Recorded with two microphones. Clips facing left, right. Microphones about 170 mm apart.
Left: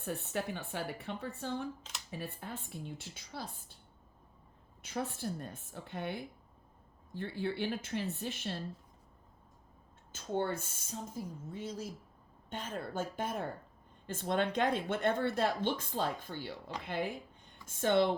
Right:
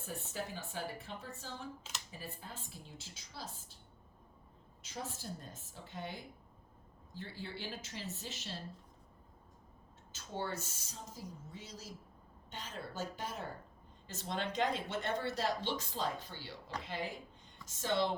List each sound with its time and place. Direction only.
0.0 s speech: 65° left (ahead or behind)
4.8 s speech: 60° left (ahead or behind)
10.1 s speech: 55° left (ahead or behind)